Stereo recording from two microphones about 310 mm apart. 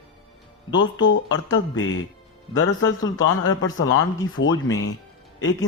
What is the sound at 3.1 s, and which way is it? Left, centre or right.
Speech, left.